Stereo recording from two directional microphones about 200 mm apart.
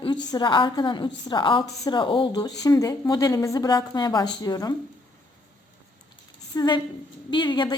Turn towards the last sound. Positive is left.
turn(degrees=20)  # may be behind; listen again after turning